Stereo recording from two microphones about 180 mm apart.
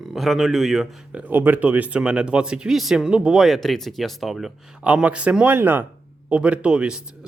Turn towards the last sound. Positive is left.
turn(degrees=-5)  # may be behind; listen again after turning